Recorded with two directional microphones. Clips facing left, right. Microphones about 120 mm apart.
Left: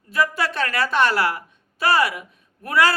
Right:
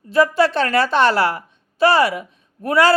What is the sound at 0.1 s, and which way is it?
Speech, 30° right (ahead or behind).